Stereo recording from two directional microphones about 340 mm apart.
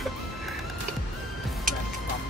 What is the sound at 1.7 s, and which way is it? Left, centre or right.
Music, right.